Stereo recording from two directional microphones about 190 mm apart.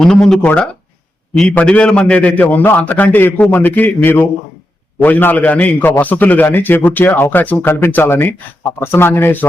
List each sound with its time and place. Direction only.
0.0 s a man's voice: 5° left (ahead or behind)